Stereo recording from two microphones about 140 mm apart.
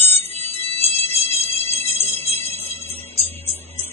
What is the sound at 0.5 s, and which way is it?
Music, 45° left (ahead or behind).